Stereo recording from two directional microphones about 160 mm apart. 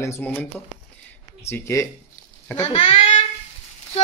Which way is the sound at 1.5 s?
20° left (ahead or behind).